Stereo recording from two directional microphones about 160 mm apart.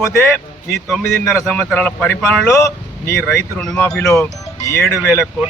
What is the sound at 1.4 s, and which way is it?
A man's voice, 10° left (ahead or behind).